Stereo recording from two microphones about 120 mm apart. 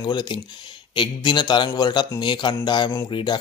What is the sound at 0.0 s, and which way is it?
Speech, 40° left (ahead or behind).